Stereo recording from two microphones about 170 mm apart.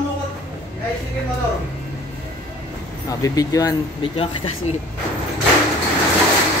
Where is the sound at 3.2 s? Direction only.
20° left (ahead or behind).